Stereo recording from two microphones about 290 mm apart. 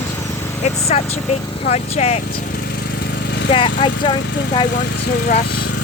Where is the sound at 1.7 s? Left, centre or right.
Left.